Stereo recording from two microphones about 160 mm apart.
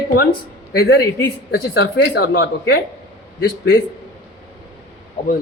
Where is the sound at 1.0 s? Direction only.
20° left (ahead or behind).